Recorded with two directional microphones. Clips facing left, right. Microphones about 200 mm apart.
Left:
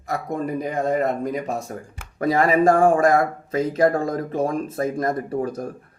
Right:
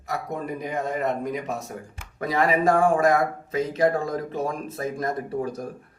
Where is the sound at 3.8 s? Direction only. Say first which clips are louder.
Left 3 dB; 50° left (ahead or behind).